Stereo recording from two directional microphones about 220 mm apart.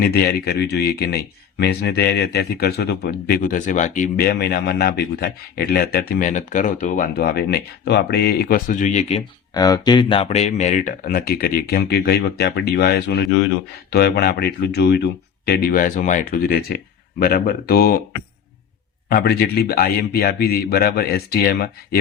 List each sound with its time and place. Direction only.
0.0 s speech: 45° left (ahead or behind)
9.6 s speech: 15° left (ahead or behind); by 21.7 s 45° left (ahead or behind)